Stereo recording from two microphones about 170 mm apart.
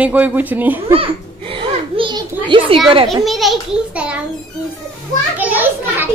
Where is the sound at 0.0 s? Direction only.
10° right (ahead or behind).